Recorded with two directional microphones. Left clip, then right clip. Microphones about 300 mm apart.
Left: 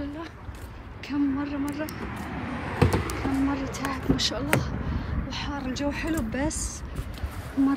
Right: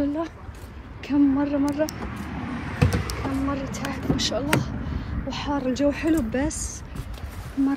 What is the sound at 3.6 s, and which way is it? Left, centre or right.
Speech, centre.